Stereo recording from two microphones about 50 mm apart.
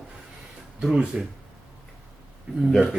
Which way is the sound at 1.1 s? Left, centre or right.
Right.